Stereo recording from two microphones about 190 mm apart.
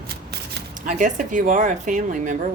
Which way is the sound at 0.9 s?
40° right (ahead or behind).